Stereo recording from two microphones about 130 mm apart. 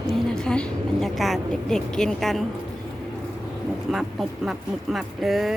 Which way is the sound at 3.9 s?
Centre (ahead or behind).